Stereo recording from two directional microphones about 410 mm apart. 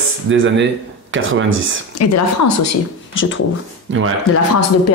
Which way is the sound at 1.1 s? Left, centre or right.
Right.